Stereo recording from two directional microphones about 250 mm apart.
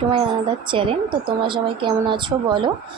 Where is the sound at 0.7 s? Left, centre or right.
Centre.